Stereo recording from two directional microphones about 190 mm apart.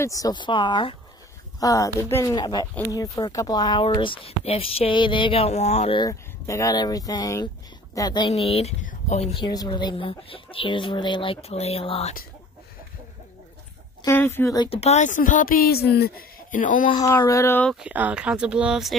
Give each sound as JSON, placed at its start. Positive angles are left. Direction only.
{"t": 0.0, "sound": "speech", "side_deg": 20}
{"t": 6.0, "sound": "a woman's voice", "side_deg": 15}
{"t": 8.3, "sound": "speech", "side_deg": 30}
{"t": 14.0, "sound": "speech", "side_deg": 10}
{"t": 14.7, "sound": "speech", "side_deg": 35}
{"t": 17.0, "sound": "speech", "side_deg": 15}
{"t": 17.7, "sound": "speech", "side_deg": -5}